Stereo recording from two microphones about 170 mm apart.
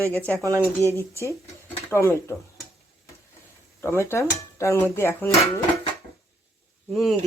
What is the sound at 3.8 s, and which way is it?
Speech, 15° left (ahead or behind).